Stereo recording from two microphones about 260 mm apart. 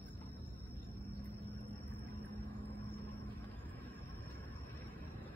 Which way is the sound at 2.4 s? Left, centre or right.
Centre.